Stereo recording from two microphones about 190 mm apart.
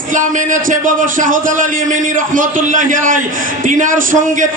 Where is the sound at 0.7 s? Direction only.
45° right (ahead or behind).